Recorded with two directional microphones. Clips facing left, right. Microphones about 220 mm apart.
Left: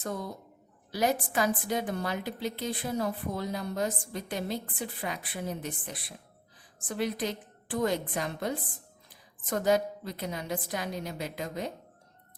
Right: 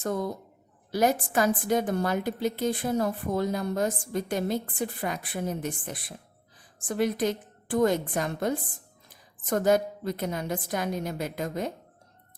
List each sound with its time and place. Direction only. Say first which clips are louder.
0.0 s a woman's voice: right 6 dB; 45° right (ahead or behind)